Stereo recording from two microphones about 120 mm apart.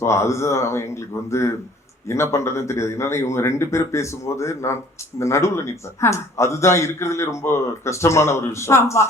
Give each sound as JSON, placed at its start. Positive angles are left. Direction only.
{"t": 0.0, "sound": "speech", "side_deg": 25}